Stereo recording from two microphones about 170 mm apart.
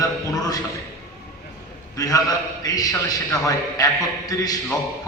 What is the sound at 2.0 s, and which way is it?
A man's voice, 20° left (ahead or behind).